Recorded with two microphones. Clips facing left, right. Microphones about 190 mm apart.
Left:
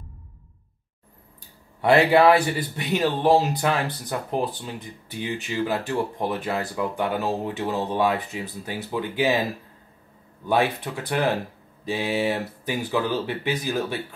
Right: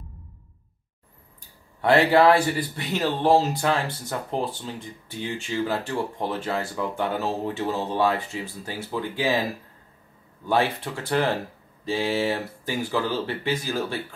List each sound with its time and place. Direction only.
1.8 s speech: 20° left (ahead or behind)
10.5 s speech: 15° left (ahead or behind)